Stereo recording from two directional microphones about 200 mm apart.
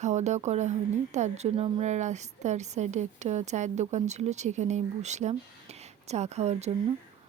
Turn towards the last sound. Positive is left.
turn(degrees=-35)  # may be behind; listen again after turning